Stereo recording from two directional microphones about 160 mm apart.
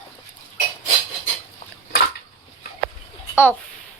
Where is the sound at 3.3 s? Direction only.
15° left (ahead or behind).